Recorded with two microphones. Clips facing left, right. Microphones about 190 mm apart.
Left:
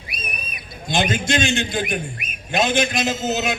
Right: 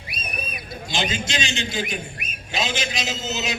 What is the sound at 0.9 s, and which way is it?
A man's voice, 55° left (ahead or behind).